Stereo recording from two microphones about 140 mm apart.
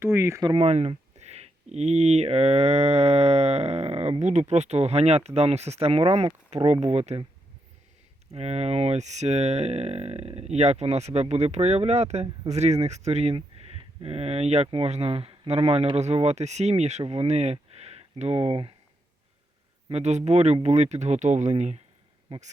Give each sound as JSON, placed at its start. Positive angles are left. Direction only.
{"t": 0.0, "sound": "speech", "side_deg": -15}
{"t": 0.6, "sound": "speech", "side_deg": -50}
{"t": 8.3, "sound": "speech", "side_deg": -50}
{"t": 19.9, "sound": "speech", "side_deg": -55}